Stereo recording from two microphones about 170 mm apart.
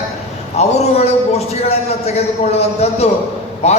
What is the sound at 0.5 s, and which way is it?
A man's voice, 40° left (ahead or behind).